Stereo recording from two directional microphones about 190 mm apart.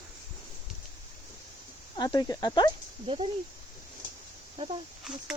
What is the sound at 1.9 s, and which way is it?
Speech, 20° left (ahead or behind).